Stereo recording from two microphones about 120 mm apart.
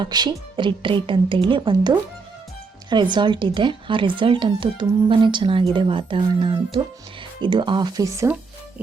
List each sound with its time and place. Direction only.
0.0 s a woman's voice: 35° right (ahead or behind)